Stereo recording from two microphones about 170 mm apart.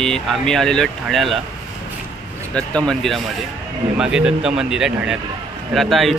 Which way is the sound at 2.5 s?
5° left (ahead or behind).